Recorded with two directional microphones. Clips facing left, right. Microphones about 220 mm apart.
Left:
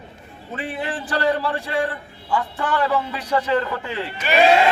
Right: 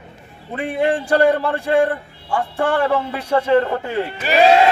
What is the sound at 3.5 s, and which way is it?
Speech, 45° right (ahead or behind).